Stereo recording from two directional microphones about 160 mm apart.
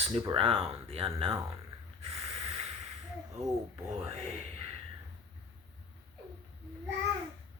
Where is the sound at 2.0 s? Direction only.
40° right (ahead or behind).